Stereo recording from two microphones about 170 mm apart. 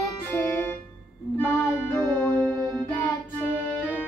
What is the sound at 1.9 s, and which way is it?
Music, 10° left (ahead or behind).